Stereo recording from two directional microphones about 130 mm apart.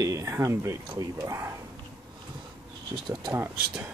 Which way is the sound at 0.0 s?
25° right (ahead or behind).